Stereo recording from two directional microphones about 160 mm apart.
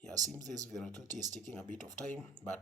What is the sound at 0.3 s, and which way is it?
Speech, 25° right (ahead or behind).